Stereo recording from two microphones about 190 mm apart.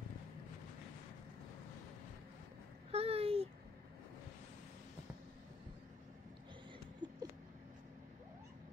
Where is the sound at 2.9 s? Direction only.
30° right (ahead or behind).